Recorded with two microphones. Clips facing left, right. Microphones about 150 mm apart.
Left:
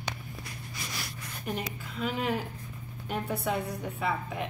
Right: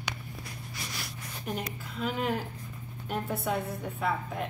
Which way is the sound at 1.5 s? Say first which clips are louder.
Left 1 dB; centre (ahead or behind).